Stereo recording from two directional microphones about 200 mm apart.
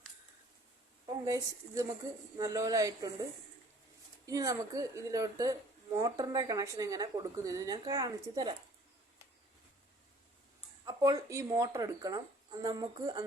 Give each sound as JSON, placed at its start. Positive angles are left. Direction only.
{"t": 1.0, "sound": "a woman's voice", "side_deg": -20}
{"t": 4.3, "sound": "speech", "side_deg": -15}
{"t": 10.8, "sound": "speech", "side_deg": -20}